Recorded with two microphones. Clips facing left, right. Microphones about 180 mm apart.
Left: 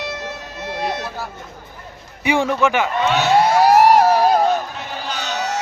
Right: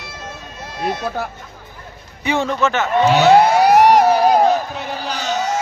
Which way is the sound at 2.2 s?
10° left (ahead or behind).